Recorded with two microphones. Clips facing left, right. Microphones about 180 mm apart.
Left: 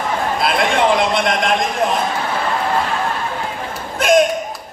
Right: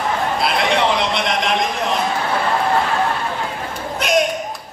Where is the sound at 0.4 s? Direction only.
50° left (ahead or behind).